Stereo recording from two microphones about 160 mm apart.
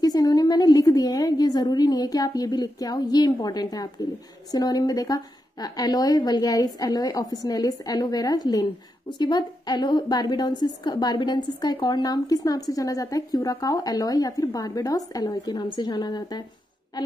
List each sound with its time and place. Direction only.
0.0 s a woman's voice: 25° left (ahead or behind)